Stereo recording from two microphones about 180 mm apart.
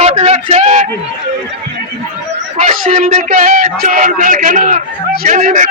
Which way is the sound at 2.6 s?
45° right (ahead or behind).